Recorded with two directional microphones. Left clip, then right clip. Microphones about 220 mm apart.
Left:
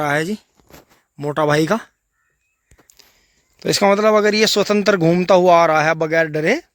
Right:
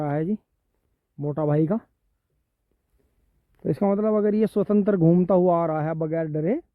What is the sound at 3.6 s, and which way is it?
Speech, 10° left (ahead or behind).